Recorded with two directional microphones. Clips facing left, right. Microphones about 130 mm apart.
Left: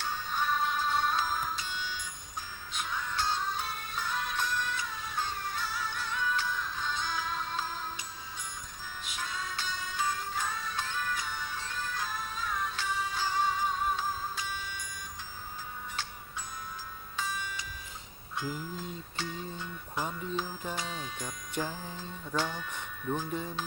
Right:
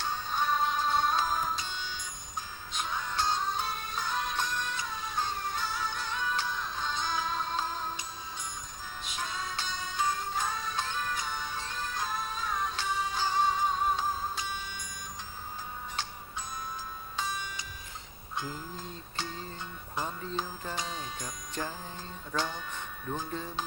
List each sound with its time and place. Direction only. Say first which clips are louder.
0.0 s music: right 2 dB; 25° right (ahead or behind)
9.0 s music: right 2 dB; 25° right (ahead or behind)
17.2 s music: even; 25° right (ahead or behind)
18.3 s a sound: left 1 dB; 25° right (ahead or behind)
20.7 s speech: even; 20° right (ahead or behind)
21.6 s music: left 2 dB; 5° left (ahead or behind)
22.4 s speech: left 1 dB; 25° right (ahead or behind)